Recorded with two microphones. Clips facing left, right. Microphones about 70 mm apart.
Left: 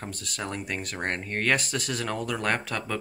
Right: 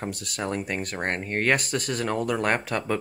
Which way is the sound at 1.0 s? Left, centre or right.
Centre.